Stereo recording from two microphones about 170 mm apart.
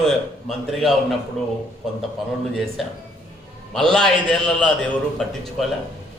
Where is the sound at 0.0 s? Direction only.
Centre (ahead or behind).